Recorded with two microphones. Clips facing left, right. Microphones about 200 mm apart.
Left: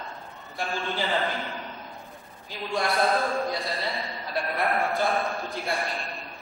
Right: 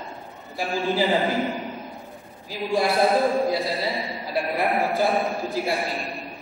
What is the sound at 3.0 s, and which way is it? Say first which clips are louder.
A man's voice: right 5 dB; 15° right (ahead or behind).